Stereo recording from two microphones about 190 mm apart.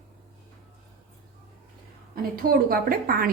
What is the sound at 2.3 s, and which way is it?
Speech, 50° right (ahead or behind).